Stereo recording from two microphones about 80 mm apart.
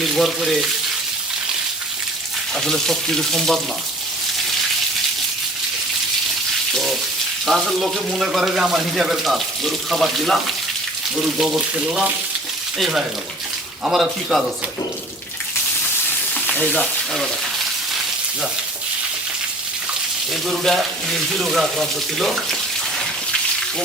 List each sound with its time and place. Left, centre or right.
0.0 s speech: centre
2.6 s speech: centre
7.4 s frying: centre
8.1 s speech: centre
12.8 s speech: centre
16.6 s speech: centre
20.3 s speech: centre